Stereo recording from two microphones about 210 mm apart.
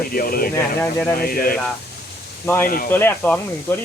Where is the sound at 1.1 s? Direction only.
45° left (ahead or behind).